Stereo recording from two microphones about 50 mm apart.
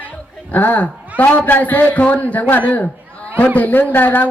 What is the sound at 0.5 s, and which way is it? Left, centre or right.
A man's voice, left.